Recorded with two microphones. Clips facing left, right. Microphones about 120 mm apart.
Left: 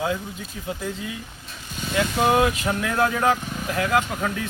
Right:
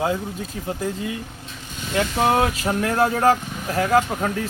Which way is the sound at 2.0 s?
35° right (ahead or behind).